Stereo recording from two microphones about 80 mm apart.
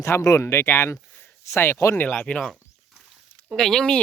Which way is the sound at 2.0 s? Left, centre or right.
Centre.